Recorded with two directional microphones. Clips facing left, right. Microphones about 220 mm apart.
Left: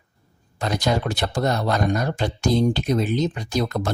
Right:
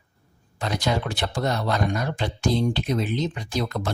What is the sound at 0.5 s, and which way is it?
Speech, 40° left (ahead or behind).